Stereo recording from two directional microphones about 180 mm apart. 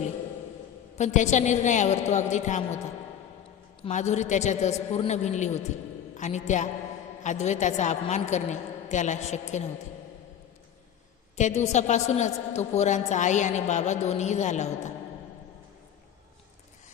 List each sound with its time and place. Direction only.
0.9 s a woman's voice: 40° left (ahead or behind)
3.8 s a woman's voice: 40° left (ahead or behind)
11.3 s a woman's voice: 40° left (ahead or behind)